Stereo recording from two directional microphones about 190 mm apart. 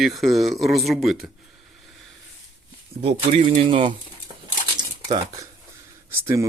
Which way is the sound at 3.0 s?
35° right (ahead or behind).